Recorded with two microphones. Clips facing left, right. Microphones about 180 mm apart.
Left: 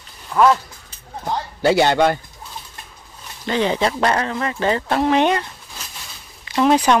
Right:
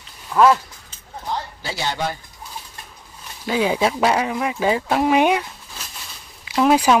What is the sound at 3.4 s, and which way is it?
Speech, 5° right (ahead or behind).